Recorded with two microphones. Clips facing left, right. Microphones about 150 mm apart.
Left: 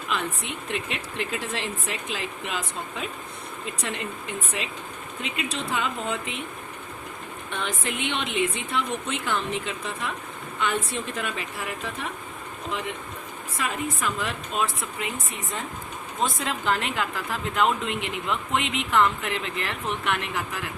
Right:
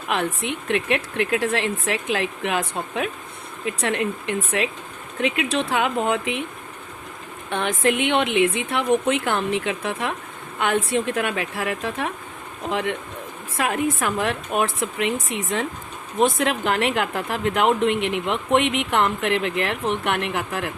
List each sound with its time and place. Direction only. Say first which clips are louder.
0.1 s a woman's voice: right 6 dB; 65° right (ahead or behind)
7.5 s a woman's voice: right 10 dB; 60° right (ahead or behind); by 15.6 s 85° right
16.1 s a woman's voice: right 8 dB; 70° right (ahead or behind)